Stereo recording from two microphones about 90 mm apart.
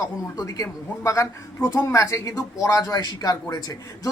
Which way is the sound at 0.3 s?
40° left (ahead or behind).